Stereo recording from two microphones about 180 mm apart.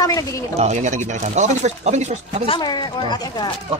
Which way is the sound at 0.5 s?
40° right (ahead or behind).